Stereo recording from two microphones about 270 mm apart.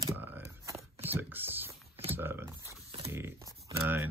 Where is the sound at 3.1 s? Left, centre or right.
Centre.